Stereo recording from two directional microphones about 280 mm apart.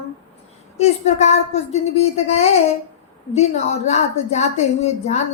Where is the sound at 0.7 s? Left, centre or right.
Left.